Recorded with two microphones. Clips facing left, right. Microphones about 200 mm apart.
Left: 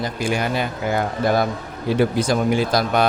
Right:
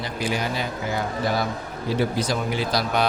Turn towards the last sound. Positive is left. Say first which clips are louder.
# left 4 dB
turn(degrees=50)  # may be behind; listen again after turning